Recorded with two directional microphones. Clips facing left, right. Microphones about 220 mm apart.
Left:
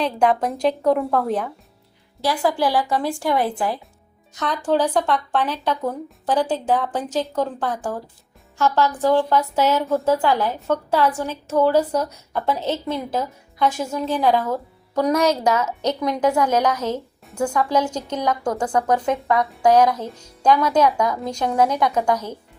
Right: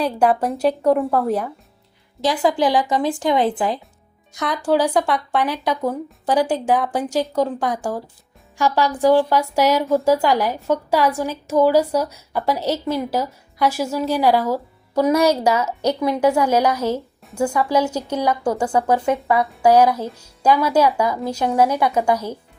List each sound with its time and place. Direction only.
0.0 s a woman's voice: 5° right (ahead or behind)
2.2 s a woman's voice: 20° right (ahead or behind)